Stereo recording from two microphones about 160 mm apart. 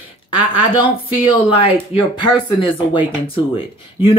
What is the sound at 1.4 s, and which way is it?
Speech, 35° left (ahead or behind).